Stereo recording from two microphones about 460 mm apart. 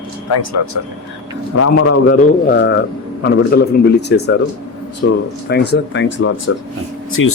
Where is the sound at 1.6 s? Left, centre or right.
Left.